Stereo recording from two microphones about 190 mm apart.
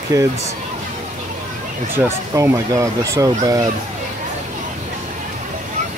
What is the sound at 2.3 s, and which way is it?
Speech, 15° right (ahead or behind).